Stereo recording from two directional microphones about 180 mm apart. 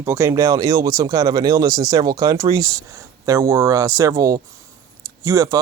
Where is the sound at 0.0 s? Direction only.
15° right (ahead or behind).